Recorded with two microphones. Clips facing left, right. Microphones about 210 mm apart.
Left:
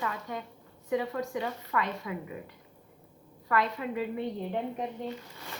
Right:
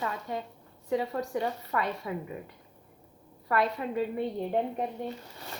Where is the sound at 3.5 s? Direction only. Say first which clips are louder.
Right 1 dB; 30° right (ahead or behind).